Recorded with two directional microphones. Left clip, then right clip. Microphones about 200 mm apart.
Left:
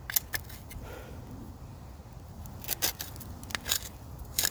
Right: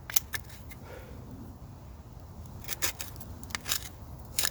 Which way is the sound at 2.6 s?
5° left (ahead or behind).